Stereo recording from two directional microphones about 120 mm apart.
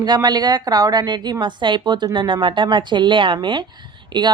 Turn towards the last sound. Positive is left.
turn(degrees=-40)  # may be behind; listen again after turning